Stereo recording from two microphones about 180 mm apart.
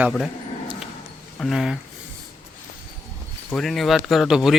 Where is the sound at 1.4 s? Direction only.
Centre (ahead or behind).